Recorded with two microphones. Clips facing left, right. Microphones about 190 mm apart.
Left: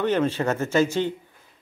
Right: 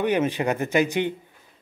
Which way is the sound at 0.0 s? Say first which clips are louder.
Even; 15° right (ahead or behind).